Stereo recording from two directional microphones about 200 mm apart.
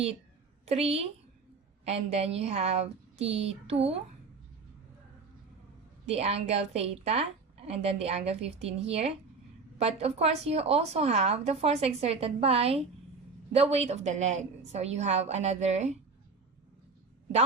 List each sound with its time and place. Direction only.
0.6 s a woman's voice: 30° right (ahead or behind)
6.1 s a woman's voice: 30° right (ahead or behind)